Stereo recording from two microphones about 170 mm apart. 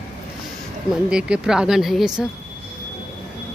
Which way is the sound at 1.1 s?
5° right (ahead or behind).